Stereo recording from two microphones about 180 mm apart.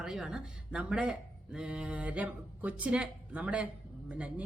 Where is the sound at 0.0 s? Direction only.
5° right (ahead or behind).